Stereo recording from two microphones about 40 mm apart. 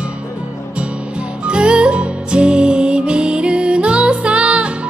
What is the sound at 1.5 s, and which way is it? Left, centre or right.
Music, right.